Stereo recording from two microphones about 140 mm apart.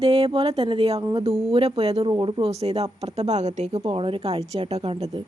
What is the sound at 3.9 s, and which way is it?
A woman's voice, 40° right (ahead or behind).